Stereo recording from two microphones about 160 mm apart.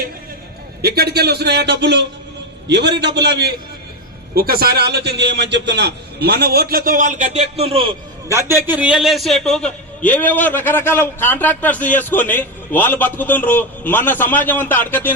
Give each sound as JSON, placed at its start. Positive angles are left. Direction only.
{"t": 0.8, "sound": "a man's voice", "side_deg": -80}
{"t": 4.4, "sound": "a man's voice", "side_deg": -70}
{"t": 8.3, "sound": "a man's voice", "side_deg": -20}